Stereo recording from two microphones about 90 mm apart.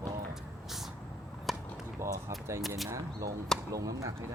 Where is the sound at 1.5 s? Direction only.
Centre (ahead or behind).